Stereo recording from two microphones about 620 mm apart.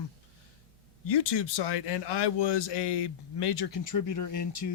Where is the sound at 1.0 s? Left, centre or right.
Left.